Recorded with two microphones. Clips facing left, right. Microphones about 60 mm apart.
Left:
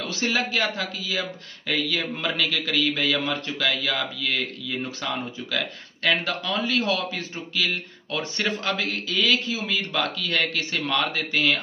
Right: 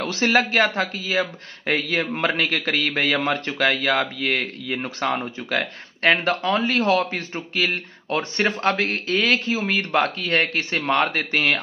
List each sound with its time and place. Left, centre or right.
0.0 s a man's voice: right